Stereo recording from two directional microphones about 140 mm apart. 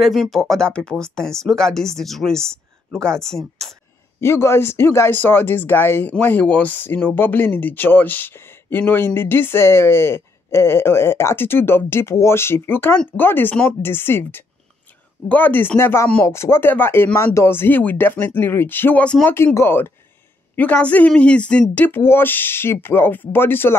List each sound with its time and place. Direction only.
0.0 s speech: centre (ahead or behind)
4.2 s speech: 20° left (ahead or behind)